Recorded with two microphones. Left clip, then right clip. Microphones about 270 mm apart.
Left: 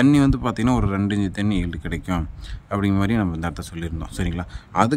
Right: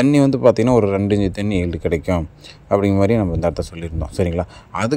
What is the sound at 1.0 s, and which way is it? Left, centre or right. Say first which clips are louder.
Speech: right 7 dB; left.